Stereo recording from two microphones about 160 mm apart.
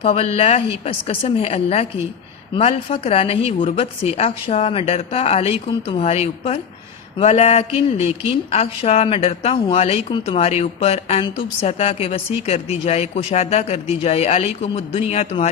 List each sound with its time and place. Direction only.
0.0 s a man's voice: 40° left (ahead or behind)